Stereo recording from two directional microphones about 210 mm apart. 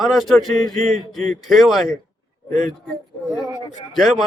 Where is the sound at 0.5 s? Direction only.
35° right (ahead or behind).